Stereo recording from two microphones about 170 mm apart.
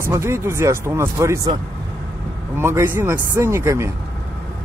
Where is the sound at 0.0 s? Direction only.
15° right (ahead or behind).